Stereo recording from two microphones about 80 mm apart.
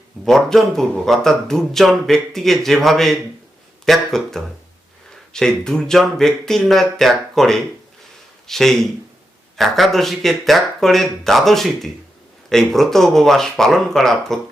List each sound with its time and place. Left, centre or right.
0.3 s speech: centre